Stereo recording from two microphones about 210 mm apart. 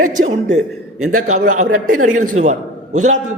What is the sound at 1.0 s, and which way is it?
Speech, 90° right.